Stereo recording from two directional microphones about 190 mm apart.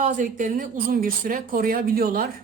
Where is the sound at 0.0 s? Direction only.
45° right (ahead or behind).